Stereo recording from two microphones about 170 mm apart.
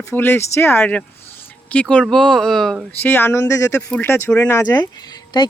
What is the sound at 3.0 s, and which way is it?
Speech, 10° left (ahead or behind).